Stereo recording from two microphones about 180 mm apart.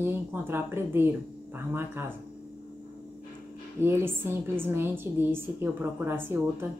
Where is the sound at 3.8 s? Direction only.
10° right (ahead or behind).